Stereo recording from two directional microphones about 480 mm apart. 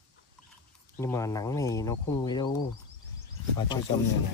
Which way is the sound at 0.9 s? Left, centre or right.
Centre.